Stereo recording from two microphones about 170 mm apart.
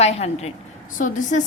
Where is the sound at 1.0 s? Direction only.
50° left (ahead or behind).